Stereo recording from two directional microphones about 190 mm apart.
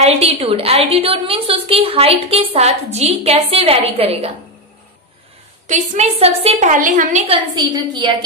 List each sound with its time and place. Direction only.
0.0 s a woman's voice: 30° right (ahead or behind)
5.7 s a woman's voice: 40° right (ahead or behind)
7.5 s a woman's voice: 25° right (ahead or behind)